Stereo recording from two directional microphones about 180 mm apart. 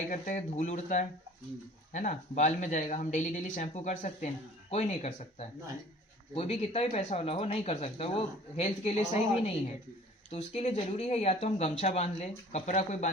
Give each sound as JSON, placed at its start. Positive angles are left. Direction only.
{"t": 0.1, "sound": "speech", "side_deg": 45}